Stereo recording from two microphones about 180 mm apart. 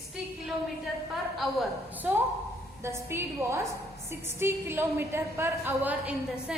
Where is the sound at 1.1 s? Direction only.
Centre (ahead or behind).